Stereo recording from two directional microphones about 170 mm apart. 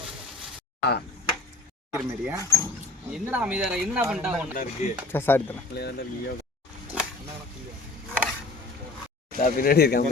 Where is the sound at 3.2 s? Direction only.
10° right (ahead or behind).